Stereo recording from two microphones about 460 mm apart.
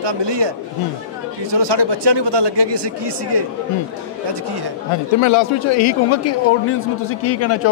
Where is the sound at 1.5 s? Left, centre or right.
Right.